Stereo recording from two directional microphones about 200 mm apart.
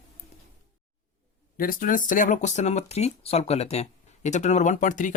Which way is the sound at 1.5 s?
45° left (ahead or behind).